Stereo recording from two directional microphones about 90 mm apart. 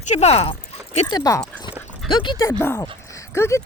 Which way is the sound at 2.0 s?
60° left (ahead or behind).